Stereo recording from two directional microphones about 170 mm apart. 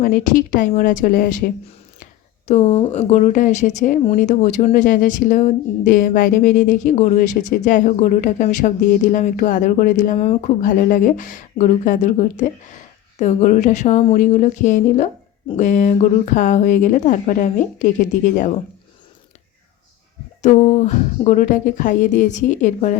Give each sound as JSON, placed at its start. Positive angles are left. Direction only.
{"t": 0.0, "sound": "speech", "side_deg": 55}
{"t": 2.5, "sound": "speech", "side_deg": 40}
{"t": 20.4, "sound": "speech", "side_deg": 45}